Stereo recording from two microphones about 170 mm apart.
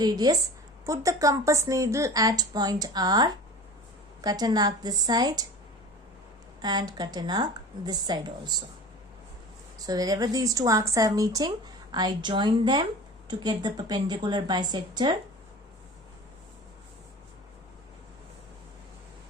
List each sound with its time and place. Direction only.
0.0 s a woman's voice: 25° right (ahead or behind)
6.6 s a woman's voice: 25° right (ahead or behind)
9.7 s a woman's voice: 20° right (ahead or behind)